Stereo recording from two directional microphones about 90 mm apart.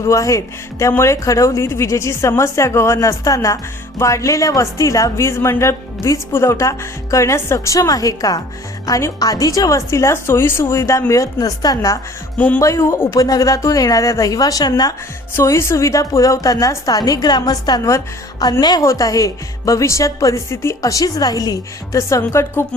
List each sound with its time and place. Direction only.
0.0 s speech: 35° left (ahead or behind)
12.4 s speech: 20° left (ahead or behind)
12.6 s speech: 35° left (ahead or behind)
15.4 s a woman's voice: 30° left (ahead or behind); by 18.9 s 50° left (ahead or behind)
18.9 s speech: 40° left (ahead or behind)